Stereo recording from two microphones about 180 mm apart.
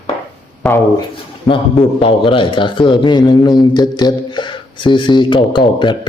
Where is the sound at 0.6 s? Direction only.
5° left (ahead or behind).